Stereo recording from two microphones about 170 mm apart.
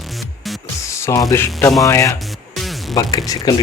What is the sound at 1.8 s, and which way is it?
Speech, 20° left (ahead or behind).